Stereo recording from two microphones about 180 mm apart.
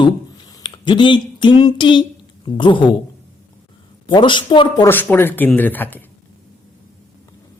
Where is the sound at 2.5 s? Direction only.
25° left (ahead or behind).